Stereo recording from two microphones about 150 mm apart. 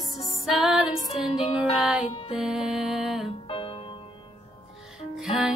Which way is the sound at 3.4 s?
35° left (ahead or behind).